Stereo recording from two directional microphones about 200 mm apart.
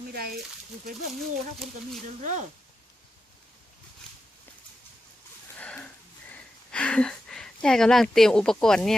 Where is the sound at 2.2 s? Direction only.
35° right (ahead or behind).